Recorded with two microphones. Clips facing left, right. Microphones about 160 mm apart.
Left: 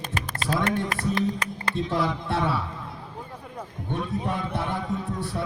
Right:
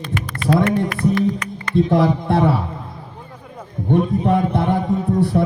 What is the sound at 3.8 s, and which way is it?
Speech, 55° right (ahead or behind).